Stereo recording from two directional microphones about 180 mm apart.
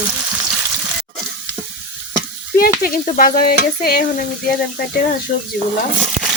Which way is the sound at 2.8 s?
55° left (ahead or behind).